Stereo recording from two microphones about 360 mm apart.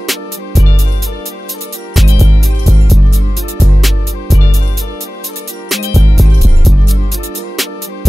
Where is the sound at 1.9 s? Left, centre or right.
Centre.